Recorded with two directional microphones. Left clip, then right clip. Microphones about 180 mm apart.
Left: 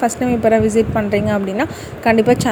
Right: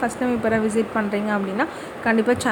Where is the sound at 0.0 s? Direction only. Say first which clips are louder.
Left 7 dB; 20° left (ahead or behind).